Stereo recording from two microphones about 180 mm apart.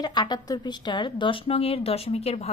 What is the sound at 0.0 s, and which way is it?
A woman's voice, 25° left (ahead or behind).